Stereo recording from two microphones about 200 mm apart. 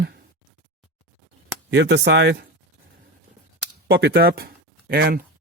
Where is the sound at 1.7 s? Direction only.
60° right (ahead or behind).